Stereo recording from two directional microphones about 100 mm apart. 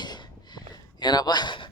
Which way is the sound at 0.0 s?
45° left (ahead or behind).